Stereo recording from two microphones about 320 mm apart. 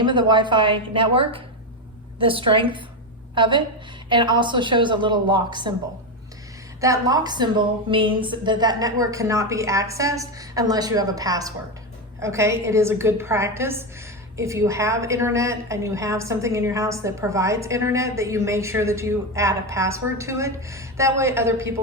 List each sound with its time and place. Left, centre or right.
0.0 s a woman's voice: centre
6.8 s a woman's voice: centre